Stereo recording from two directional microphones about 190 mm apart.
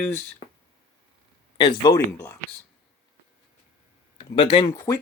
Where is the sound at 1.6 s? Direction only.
25° left (ahead or behind).